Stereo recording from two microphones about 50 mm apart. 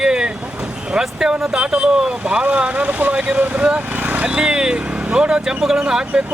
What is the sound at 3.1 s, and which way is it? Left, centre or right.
Speech, right.